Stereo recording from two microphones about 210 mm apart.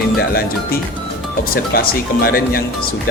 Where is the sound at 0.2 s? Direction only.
45° left (ahead or behind).